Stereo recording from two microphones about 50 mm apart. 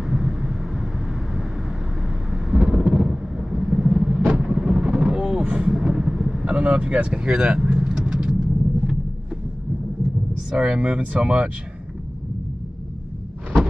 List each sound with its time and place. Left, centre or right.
0.0 s vehicle: centre
6.4 s vehicle: right
10.5 s speech: centre